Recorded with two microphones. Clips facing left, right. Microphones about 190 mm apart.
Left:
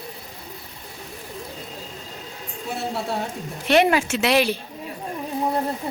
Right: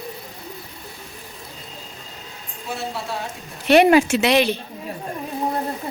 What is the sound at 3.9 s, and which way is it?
Speech, 15° right (ahead or behind).